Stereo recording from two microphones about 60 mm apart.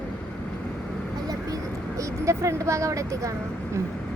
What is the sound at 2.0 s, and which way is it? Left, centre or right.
Speech, right.